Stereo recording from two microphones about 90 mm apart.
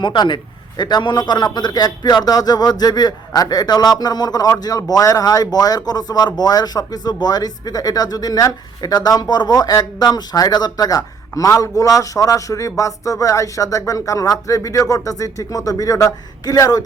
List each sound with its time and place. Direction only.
0.0 s a man's voice: 60° left (ahead or behind); by 16.8 s 45° left (ahead or behind)